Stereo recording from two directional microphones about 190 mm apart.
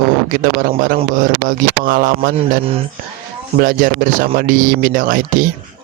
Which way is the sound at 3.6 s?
45° right (ahead or behind).